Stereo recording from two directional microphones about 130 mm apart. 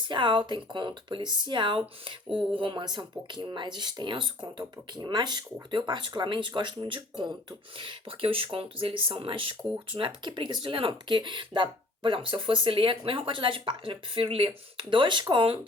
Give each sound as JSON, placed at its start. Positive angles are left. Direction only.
{"t": 0.0, "sound": "speech", "side_deg": -40}